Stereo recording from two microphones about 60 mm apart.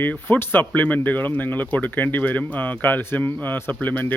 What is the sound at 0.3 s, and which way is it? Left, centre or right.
Speech, left.